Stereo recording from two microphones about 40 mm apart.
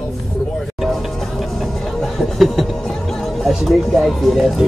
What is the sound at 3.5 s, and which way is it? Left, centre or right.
Music, centre.